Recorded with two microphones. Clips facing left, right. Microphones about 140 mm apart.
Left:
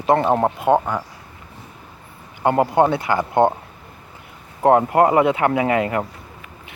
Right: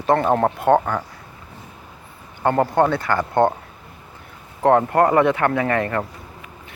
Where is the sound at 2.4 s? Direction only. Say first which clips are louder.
Left 1 dB; 15° left (ahead or behind).